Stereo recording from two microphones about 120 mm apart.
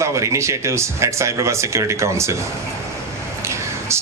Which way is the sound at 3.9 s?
25° right (ahead or behind).